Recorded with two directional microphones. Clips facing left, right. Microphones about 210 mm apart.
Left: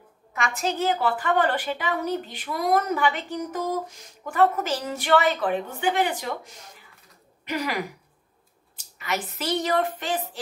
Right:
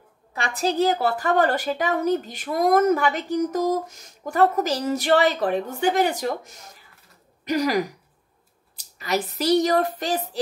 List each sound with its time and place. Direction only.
0.3 s a woman's voice: 35° right (ahead or behind)